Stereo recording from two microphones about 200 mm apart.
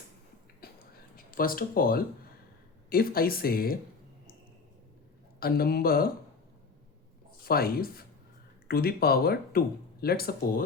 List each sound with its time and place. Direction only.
0.6 s a sound: 50° left (ahead or behind)
1.1 s speech: 45° left (ahead or behind)
5.4 s speech: 50° left (ahead or behind)
7.4 s speech: 50° left (ahead or behind)